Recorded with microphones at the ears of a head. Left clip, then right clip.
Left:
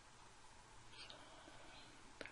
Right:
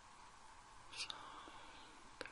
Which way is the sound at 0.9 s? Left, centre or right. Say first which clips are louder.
Right 9 dB; right.